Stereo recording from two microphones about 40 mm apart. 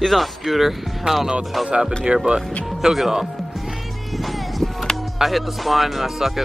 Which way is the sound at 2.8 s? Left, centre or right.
Centre.